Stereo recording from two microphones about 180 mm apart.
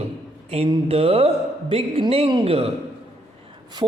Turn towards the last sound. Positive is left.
turn(degrees=-25)  # may be behind; listen again after turning